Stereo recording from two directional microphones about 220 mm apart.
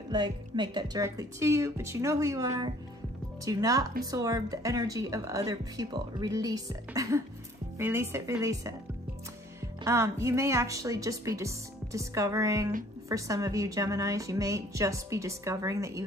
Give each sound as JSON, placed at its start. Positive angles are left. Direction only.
{"t": 0.1, "sound": "speech", "side_deg": -20}
{"t": 9.8, "sound": "speech", "side_deg": -10}